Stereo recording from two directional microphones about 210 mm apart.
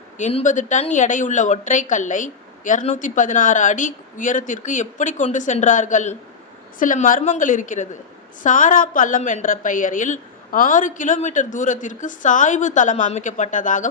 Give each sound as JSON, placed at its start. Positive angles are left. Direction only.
{"t": 0.2, "sound": "a woman's voice", "side_deg": 35}